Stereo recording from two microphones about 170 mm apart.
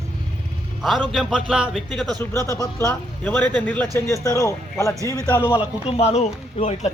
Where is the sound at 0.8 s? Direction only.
Centre (ahead or behind).